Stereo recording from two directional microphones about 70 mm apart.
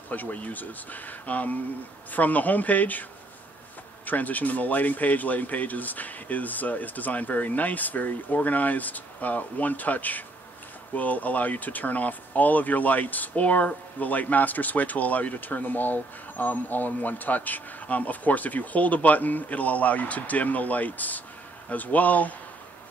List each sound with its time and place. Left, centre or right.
0.1 s speech: left